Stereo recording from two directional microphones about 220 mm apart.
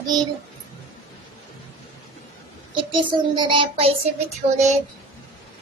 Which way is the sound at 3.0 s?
20° right (ahead or behind).